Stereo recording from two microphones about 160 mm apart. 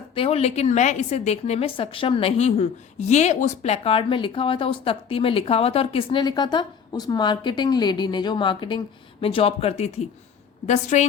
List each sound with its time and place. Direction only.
0.1 s a woman's voice: 35° left (ahead or behind)